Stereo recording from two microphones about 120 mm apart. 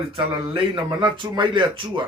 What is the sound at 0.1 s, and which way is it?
Speech, 45° right (ahead or behind).